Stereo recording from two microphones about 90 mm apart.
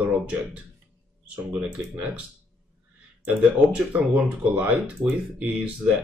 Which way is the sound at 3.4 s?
15° right (ahead or behind).